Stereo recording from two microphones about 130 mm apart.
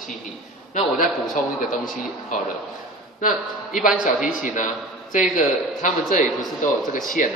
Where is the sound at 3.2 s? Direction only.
90° left.